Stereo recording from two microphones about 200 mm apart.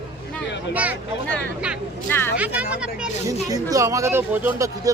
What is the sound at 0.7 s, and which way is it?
Speech, 5° right (ahead or behind).